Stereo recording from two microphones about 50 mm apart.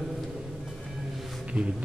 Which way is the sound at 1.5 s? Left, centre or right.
Right.